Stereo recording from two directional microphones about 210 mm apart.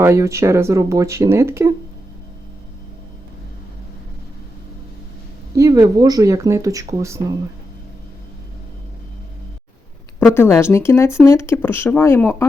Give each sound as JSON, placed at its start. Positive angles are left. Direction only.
{"t": 0.0, "sound": "speech", "side_deg": -15}
{"t": 5.5, "sound": "speech", "side_deg": -15}
{"t": 10.2, "sound": "speech", "side_deg": 10}